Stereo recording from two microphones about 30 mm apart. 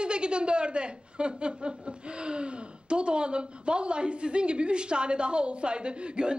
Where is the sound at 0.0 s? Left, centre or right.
Right.